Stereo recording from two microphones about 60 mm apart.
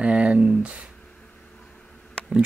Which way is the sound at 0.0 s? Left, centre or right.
Centre.